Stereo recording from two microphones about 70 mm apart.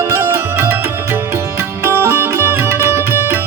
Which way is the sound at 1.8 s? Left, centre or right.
Right.